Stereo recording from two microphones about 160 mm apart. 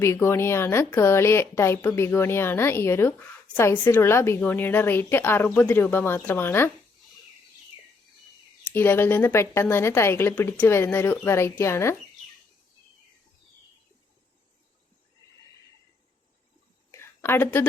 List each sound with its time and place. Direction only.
0.0 s a woman's voice: 15° left (ahead or behind)
8.6 s a woman's voice: 10° left (ahead or behind)
16.9 s a sound: 15° left (ahead or behind)